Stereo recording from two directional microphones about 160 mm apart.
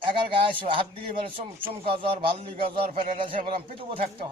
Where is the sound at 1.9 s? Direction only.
35° right (ahead or behind).